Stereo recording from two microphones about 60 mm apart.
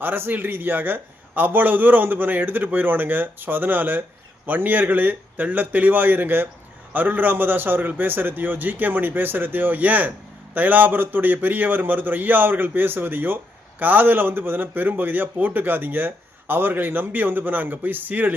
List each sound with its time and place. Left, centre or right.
0.0 s a man's voice: right